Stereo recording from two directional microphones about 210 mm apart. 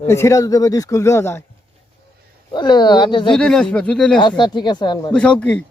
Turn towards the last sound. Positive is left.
turn(degrees=5)  # may be behind; listen again after turning